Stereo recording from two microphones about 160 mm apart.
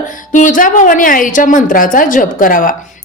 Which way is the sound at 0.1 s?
55° left (ahead or behind).